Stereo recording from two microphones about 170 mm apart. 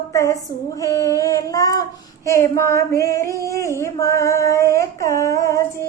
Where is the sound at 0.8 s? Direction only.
20° left (ahead or behind).